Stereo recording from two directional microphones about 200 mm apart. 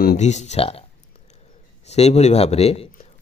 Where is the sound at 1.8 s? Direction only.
30° left (ahead or behind).